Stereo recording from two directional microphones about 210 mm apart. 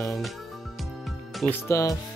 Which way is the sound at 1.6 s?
15° left (ahead or behind).